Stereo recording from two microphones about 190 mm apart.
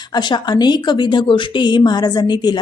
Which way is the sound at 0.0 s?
25° left (ahead or behind).